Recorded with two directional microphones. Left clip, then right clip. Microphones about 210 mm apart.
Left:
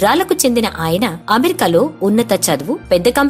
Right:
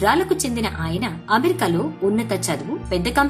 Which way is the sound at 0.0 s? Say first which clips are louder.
Left 6 dB; 40° left (ahead or behind).